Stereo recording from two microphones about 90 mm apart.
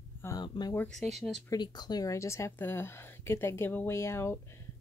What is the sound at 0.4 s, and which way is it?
Speech, 50° left (ahead or behind).